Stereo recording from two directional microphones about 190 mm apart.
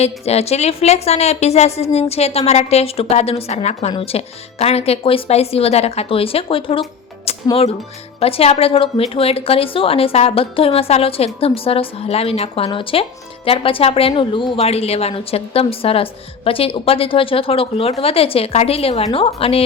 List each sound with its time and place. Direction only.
0.0 s a woman's voice: 35° left (ahead or behind)
7.3 s music: 30° left (ahead or behind)
8.2 s a woman's voice: 30° left (ahead or behind)